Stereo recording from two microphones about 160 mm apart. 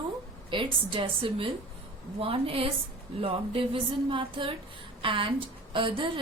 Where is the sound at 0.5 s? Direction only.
30° right (ahead or behind).